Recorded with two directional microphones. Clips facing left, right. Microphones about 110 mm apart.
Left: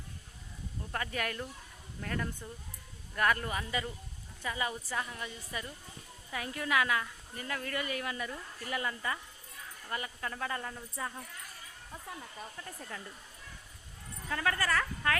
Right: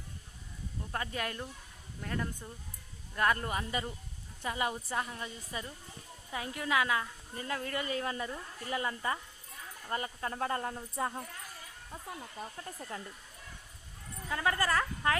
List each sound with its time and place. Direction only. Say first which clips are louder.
0.9 s a woman's voice: left 1 dB; 25° right (ahead or behind)
4.4 s a woman's voice: right 2 dB; 45° right (ahead or behind)
4.7 s a woman's voice: right 1 dB; 30° right (ahead or behind)
12.4 s a woman's voice: right 2 dB; 30° right (ahead or behind)
14.3 s a woman's voice: right 1 dB; 15° right (ahead or behind)